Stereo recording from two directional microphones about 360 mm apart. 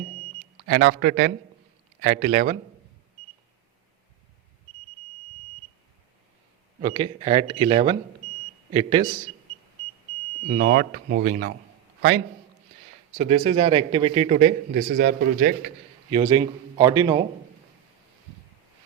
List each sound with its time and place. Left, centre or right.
0.7 s speech: right
6.8 s a man's voice: centre
10.6 s speech: right
13.1 s a man's voice: centre